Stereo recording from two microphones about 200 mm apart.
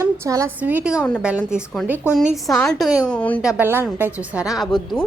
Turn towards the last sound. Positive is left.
turn(degrees=0)  # may be behind; listen again after turning